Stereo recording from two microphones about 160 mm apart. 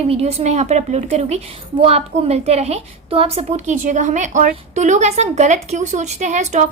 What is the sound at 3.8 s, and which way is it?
A woman's voice, 50° right (ahead or behind).